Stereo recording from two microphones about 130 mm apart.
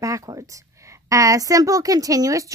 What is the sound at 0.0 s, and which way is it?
A woman's voice, 25° right (ahead or behind).